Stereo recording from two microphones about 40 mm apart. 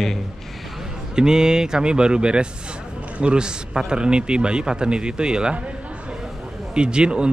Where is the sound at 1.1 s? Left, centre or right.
Centre.